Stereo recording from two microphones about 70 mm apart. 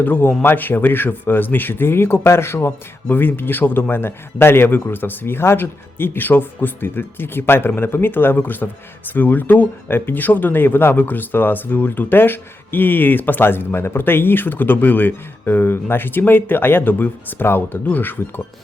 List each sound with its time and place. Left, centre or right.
0.0 s speech: left